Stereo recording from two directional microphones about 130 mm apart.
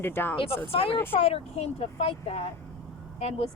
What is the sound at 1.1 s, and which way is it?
Speech, 50° left (ahead or behind).